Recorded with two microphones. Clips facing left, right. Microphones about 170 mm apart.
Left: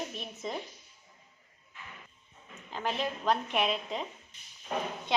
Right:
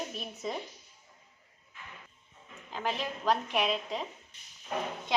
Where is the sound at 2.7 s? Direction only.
Centre (ahead or behind).